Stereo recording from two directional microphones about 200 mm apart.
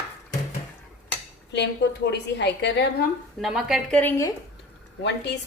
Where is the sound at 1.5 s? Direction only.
60° left (ahead or behind).